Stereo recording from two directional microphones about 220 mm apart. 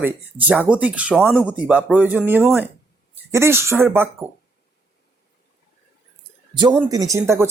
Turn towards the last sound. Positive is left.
turn(degrees=-10)  # may be behind; listen again after turning